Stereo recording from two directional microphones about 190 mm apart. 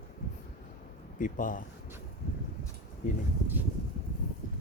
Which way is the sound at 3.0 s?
40° left (ahead or behind).